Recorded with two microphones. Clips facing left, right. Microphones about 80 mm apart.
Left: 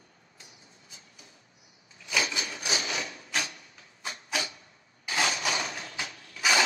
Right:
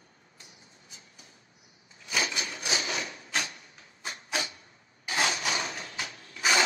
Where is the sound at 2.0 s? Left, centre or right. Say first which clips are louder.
Left 1 dB; right.